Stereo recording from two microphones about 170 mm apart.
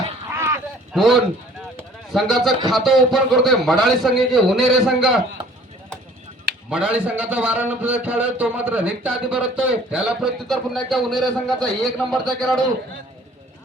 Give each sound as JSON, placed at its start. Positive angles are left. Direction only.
{"t": 0.3, "sound": "a sound", "side_deg": -15}
{"t": 0.9, "sound": "a man's voice", "side_deg": 0}
{"t": 6.7, "sound": "a man's voice", "side_deg": -5}